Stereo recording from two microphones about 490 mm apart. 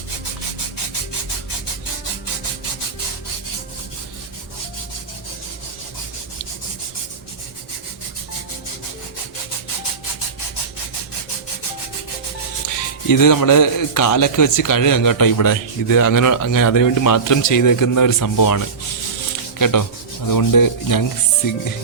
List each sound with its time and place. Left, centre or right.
12.6 s a man's voice: left
19.5 s a sound: left
20.2 s a man's voice: left